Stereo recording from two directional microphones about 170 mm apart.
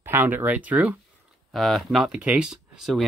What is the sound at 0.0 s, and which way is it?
Speech, 10° right (ahead or behind).